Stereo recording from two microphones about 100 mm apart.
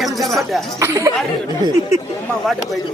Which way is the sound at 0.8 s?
35° right (ahead or behind).